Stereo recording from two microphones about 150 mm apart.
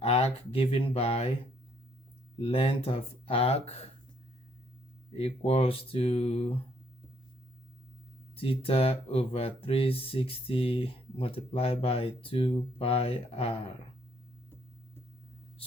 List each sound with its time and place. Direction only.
0.0 s speech: 40° left (ahead or behind)
2.4 s speech: 40° left (ahead or behind)
5.1 s speech: 40° left (ahead or behind)
8.4 s speech: 40° left (ahead or behind)